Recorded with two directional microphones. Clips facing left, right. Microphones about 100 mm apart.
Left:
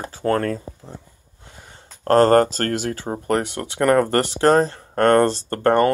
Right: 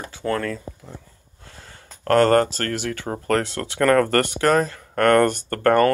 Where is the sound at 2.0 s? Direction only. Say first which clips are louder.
Left 2 dB; 35° left (ahead or behind).